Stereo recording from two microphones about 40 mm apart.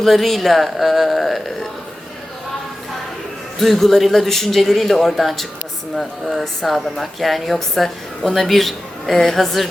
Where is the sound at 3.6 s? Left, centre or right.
Centre.